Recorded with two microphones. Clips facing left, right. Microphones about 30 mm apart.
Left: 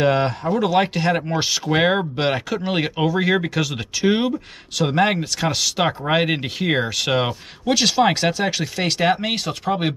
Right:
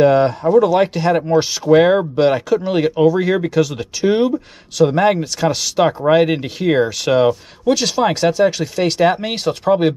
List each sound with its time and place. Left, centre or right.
0.0 s speech: centre
5.2 s speech: centre
9.3 s speech: centre
9.7 s speech: centre